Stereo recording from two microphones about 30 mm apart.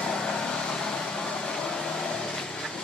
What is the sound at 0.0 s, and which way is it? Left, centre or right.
Vehicle, left.